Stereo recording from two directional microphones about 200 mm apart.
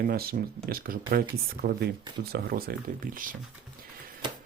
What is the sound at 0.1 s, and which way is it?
Speech, 50° right (ahead or behind).